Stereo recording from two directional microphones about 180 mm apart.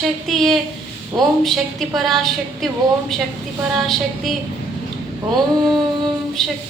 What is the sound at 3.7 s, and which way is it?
Female singing, centre (ahead or behind).